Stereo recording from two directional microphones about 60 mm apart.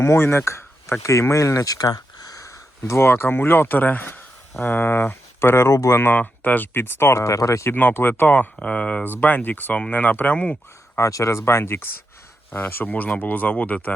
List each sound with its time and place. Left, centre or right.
0.0 s speech: left
1.0 s speech: left
1.6 s speech: left
6.0 s speech: left
7.2 s speech: left
7.9 s speech: left
8.3 s speech: left
10.3 s speech: centre
10.9 s speech: left
12.5 s speech: left